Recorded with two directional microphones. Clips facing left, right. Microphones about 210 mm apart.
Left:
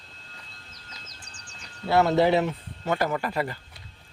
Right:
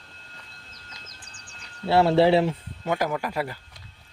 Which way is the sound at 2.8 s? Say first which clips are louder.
Even; 10° right (ahead or behind).